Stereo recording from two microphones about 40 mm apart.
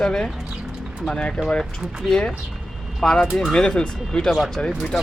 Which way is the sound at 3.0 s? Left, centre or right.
Centre.